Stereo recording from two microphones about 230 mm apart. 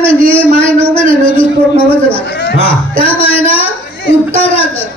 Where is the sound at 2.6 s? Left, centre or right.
Left.